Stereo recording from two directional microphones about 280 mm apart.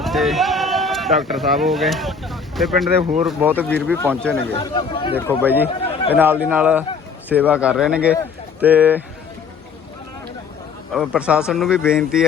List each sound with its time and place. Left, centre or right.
0.0 s speech: centre
3.0 s speech: right
3.2 s speech: centre
3.7 s speech: centre
4.5 s speech: centre
5.4 s speech: centre
10.9 s speech: centre